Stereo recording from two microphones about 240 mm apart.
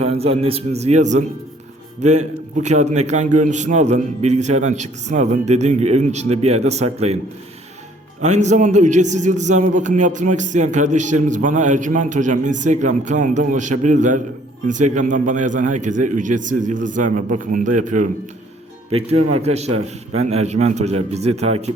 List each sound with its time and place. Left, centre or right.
0.0 s a man's voice: right
2.6 s a man's voice: right
8.2 s a man's voice: right